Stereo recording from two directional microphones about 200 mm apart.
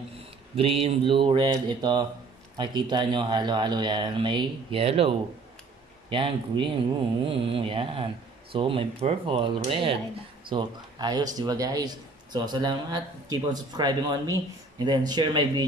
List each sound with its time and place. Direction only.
0.6 s speech: 30° right (ahead or behind)